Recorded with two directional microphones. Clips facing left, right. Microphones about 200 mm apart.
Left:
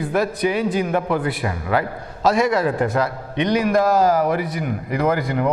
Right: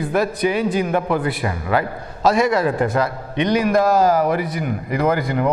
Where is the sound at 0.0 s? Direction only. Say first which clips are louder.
Right 1 dB; 10° right (ahead or behind).